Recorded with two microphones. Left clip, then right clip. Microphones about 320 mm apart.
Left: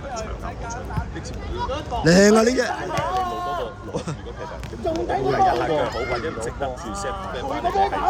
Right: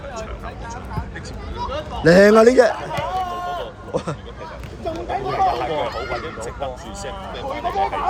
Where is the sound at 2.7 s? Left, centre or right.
Left.